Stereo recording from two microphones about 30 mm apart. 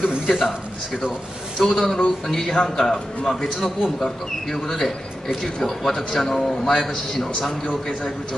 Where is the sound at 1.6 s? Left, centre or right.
Centre.